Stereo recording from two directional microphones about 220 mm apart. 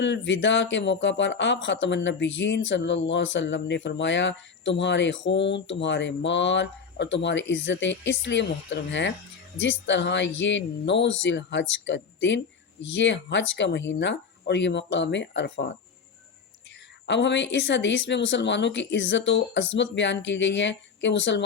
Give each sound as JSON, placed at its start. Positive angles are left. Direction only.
{"t": 0.0, "sound": "speech", "side_deg": 55}
{"t": 17.1, "sound": "speech", "side_deg": 55}